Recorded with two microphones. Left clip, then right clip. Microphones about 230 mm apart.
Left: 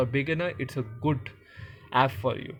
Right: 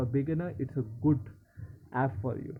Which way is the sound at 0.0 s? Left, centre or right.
Left.